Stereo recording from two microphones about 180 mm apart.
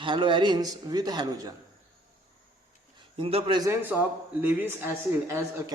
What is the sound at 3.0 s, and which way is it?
A man's voice, 30° right (ahead or behind).